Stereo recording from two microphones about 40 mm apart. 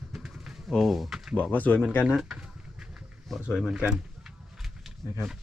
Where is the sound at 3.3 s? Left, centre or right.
Centre.